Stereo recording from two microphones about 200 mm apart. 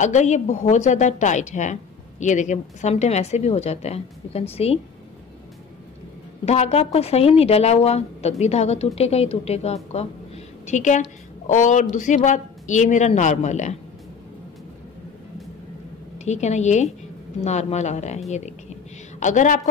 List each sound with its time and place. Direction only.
0.0 s a woman's voice: 35° left (ahead or behind)
6.4 s a woman's voice: 30° left (ahead or behind)
16.3 s a woman's voice: 35° left (ahead or behind)